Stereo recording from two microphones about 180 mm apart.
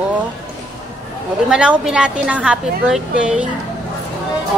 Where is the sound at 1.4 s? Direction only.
5° right (ahead or behind).